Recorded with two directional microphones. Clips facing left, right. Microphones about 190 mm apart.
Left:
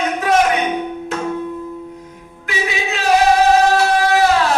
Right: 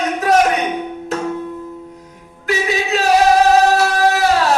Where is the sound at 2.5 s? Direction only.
40° right (ahead or behind).